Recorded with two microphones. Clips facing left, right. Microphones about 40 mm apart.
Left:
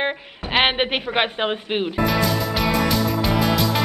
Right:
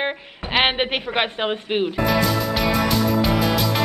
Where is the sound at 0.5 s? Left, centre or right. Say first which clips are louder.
Left 1 dB; centre.